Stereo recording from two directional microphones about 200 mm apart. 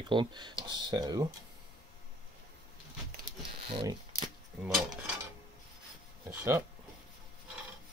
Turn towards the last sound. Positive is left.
turn(degrees=-15)  # may be behind; listen again after turning